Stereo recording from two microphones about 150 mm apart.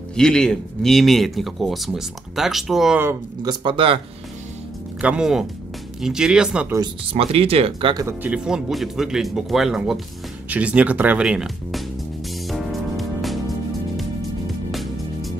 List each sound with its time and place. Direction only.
0.1 s speech: 5° left (ahead or behind)
3.4 s speech: 35° right (ahead or behind)
5.0 s speech: 5° right (ahead or behind)
7.1 s speech: 40° right (ahead or behind)
8.0 s speech: 15° right (ahead or behind)
12.4 s music: centre (ahead or behind)
14.7 s music: centre (ahead or behind)